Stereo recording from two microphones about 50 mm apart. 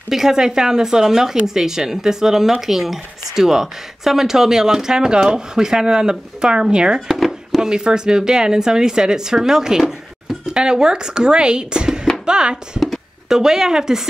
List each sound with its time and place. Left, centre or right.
0.1 s speech: centre
7.1 s a sound: centre
7.6 s speech: centre